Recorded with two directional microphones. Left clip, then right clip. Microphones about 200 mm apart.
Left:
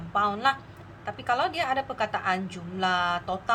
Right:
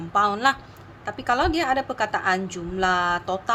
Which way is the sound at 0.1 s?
35° right (ahead or behind).